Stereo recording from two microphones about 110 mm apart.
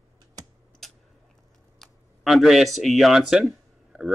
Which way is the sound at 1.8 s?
Centre (ahead or behind).